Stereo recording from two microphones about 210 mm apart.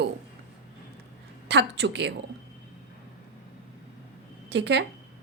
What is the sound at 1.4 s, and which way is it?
Speech, 55° right (ahead or behind).